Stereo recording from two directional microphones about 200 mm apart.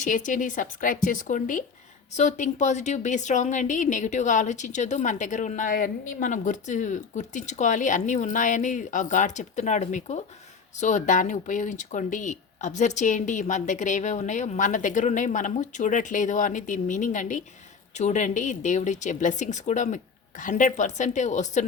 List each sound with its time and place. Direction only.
0.0 s speech: 40° left (ahead or behind)